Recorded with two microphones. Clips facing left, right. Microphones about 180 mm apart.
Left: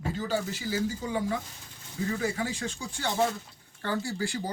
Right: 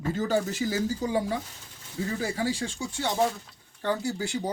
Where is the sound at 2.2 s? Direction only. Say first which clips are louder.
Right 2 dB; 35° right (ahead or behind).